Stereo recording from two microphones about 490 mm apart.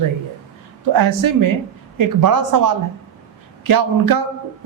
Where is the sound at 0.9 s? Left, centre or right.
Right.